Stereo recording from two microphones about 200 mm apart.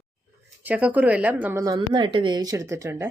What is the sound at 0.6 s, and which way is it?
Speech, 5° right (ahead or behind).